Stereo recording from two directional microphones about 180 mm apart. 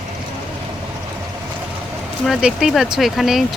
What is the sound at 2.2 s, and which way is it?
Speech, centre (ahead or behind).